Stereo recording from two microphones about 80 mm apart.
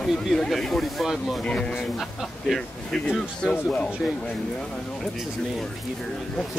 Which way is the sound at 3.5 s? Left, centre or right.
Centre.